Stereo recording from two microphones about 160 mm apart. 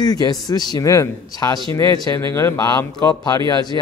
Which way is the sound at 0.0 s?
25° left (ahead or behind).